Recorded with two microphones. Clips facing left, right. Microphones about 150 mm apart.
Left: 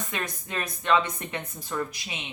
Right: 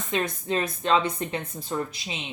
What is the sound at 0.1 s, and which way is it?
Speech, 25° right (ahead or behind).